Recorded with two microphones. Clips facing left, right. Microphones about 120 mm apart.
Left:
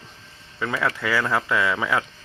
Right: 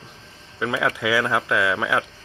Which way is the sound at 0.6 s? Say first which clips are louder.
Right 2 dB; 10° right (ahead or behind).